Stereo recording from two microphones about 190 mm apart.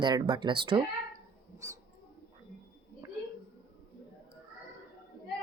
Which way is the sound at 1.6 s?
15° right (ahead or behind).